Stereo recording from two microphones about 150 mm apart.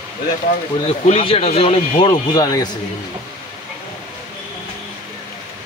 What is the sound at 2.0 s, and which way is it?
Speech, 25° left (ahead or behind).